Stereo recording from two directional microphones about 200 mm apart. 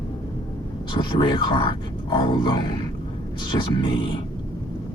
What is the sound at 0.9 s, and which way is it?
Speech, 20° left (ahead or behind).